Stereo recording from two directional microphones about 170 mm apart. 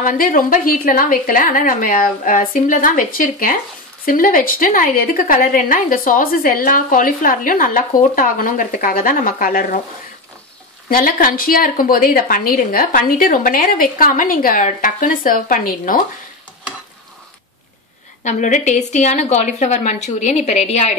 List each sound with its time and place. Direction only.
0.0 s a woman's voice: 50° left (ahead or behind)
10.9 s a woman's voice: 55° left (ahead or behind)
18.2 s a woman's voice: 45° left (ahead or behind)